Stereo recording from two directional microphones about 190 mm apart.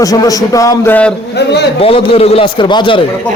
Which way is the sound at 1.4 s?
60° left (ahead or behind).